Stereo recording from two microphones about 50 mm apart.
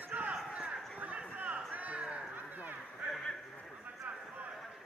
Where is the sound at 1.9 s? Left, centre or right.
Centre.